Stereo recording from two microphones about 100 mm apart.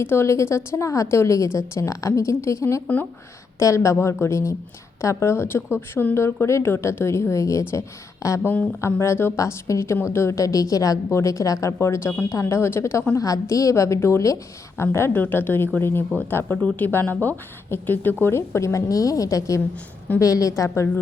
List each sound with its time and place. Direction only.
0.0 s a woman's voice: 25° left (ahead or behind)
2.8 s speech: 15° left (ahead or behind)
3.6 s a woman's voice: 30° left (ahead or behind)
20.7 s a woman's voice: 25° left (ahead or behind)